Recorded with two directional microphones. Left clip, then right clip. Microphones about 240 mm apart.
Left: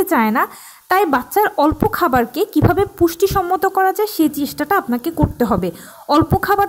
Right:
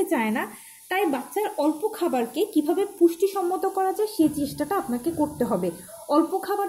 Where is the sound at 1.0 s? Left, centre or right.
Left.